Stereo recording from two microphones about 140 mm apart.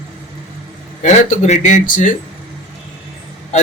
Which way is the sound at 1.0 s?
55° left (ahead or behind).